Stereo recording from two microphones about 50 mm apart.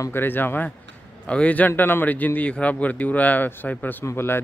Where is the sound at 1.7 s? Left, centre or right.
Left.